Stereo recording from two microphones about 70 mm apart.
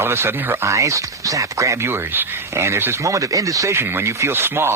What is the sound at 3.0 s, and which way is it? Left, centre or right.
Speech, right.